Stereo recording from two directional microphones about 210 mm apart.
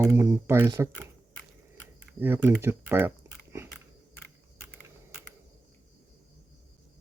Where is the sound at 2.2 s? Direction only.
10° right (ahead or behind).